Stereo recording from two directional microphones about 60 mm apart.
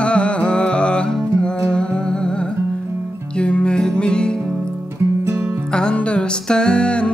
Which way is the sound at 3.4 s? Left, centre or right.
Centre.